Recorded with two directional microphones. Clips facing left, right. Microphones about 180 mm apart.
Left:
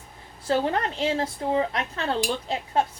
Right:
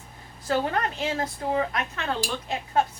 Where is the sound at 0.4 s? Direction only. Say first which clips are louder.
Left 2 dB; 30° left (ahead or behind).